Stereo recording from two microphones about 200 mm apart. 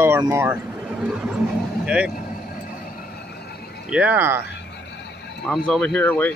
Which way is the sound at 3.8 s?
5° right (ahead or behind).